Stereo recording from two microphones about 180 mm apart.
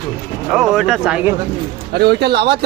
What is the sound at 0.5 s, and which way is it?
Speech, 5° right (ahead or behind).